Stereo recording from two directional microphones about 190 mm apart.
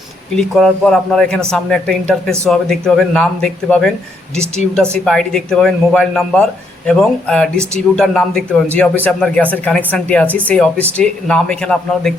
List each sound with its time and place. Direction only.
0.3 s speech: centre (ahead or behind)